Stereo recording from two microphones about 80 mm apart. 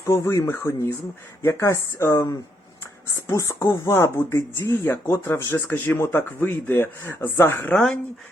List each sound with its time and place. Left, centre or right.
0.0 s speech: left
7.7 s speech: centre